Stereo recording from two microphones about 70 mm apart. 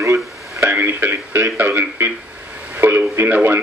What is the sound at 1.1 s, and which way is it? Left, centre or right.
Speech, right.